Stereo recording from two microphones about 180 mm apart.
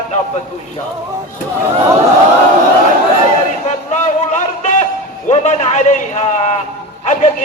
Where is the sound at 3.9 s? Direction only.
40° left (ahead or behind).